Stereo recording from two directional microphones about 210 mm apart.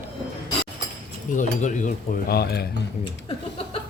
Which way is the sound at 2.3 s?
50° left (ahead or behind).